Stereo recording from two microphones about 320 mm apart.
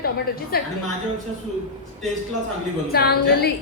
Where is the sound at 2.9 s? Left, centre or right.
Left.